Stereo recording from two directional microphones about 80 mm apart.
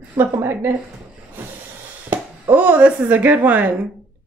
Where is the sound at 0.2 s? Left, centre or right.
Right.